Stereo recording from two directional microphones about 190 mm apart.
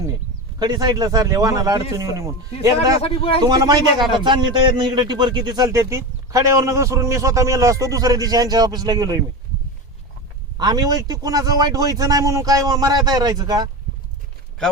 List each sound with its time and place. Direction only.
0.6 s a man's voice: 20° right (ahead or behind)
3.0 s a man's voice: 30° left (ahead or behind)
3.4 s a man's voice: 20° right (ahead or behind)
10.6 s a man's voice: 20° right (ahead or behind)